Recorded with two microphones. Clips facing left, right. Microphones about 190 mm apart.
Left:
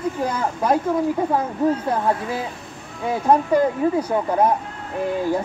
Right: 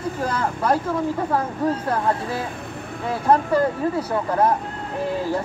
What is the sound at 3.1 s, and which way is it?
Speech, 15° left (ahead or behind).